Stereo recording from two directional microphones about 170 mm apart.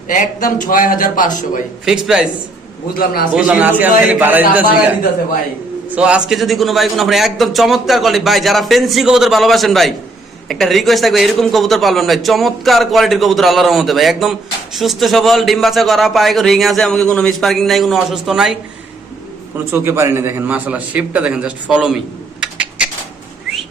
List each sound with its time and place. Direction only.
0.1 s a man's voice: 50° left (ahead or behind)
1.8 s a man's voice: 5° right (ahead or behind)
3.0 s a man's voice: 60° left (ahead or behind)
3.3 s a man's voice: 5° right (ahead or behind)
5.9 s a man's voice: 5° right (ahead or behind)
19.7 s a man's voice: 15° right (ahead or behind)